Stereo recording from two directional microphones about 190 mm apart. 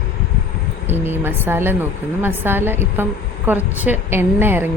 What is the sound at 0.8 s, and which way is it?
Speech, 10° right (ahead or behind).